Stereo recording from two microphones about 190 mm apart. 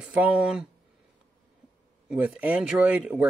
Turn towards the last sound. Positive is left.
turn(degrees=-5)  # may be behind; listen again after turning